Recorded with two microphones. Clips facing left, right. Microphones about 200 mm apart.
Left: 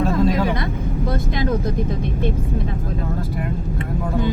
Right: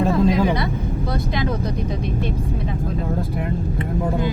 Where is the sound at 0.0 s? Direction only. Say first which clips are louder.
Right 1 dB; 15° right (ahead or behind).